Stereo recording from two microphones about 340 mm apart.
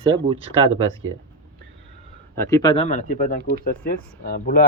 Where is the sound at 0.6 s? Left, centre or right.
Right.